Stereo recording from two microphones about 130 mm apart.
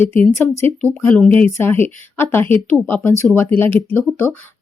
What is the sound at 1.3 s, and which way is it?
A woman's voice, 15° left (ahead or behind).